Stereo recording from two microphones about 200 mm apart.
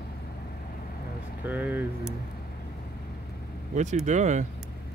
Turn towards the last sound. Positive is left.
turn(degrees=-35)  # may be behind; listen again after turning